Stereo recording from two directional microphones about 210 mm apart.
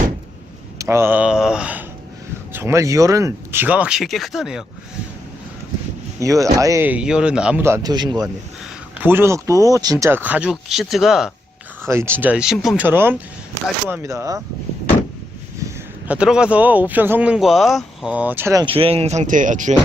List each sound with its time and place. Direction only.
0.8 s speech: 10° right (ahead or behind)
6.1 s speech: 15° right (ahead or behind)
11.9 s speech: 10° right (ahead or behind)
16.0 s speech: 5° right (ahead or behind)
18.6 s speech: 25° right (ahead or behind)